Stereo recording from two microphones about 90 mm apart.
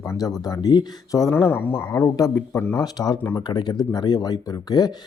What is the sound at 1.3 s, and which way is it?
Speech, 25° left (ahead or behind).